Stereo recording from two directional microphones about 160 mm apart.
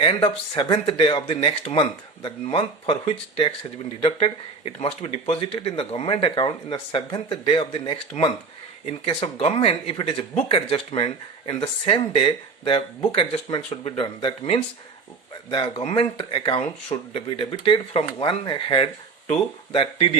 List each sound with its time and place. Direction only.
0.0 s speech: 35° left (ahead or behind)